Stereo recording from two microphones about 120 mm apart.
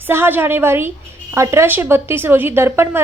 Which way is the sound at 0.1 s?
20° right (ahead or behind).